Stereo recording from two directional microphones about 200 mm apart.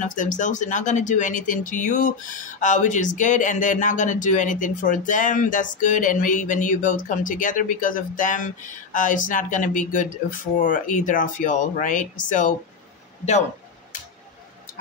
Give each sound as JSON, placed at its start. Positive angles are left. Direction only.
{"t": 0.0, "sound": "speech", "side_deg": 40}